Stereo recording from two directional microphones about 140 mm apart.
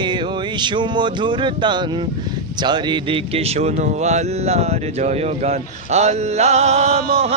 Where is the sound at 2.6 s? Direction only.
30° right (ahead or behind); by 7.0 s 50° right (ahead or behind).